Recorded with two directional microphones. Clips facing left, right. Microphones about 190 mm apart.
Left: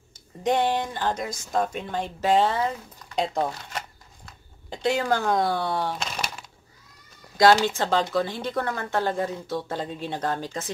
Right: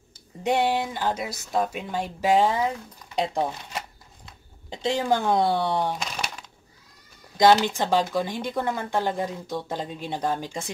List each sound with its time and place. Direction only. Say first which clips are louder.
0.4 s speech: even; 10° right (ahead or behind)
6.0 s a sound: left 1 dB; 5° left (ahead or behind)
7.6 s speech: even; 15° right (ahead or behind)